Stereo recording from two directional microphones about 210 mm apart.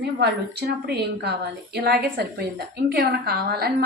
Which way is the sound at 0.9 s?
50° right (ahead or behind).